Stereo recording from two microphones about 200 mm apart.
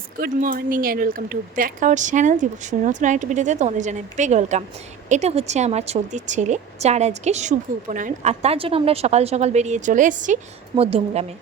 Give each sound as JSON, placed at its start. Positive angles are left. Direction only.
{"t": 0.2, "sound": "a woman's voice", "side_deg": -45}